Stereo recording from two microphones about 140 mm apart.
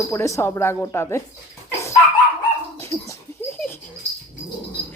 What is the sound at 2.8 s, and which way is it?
Dog, 20° left (ahead or behind).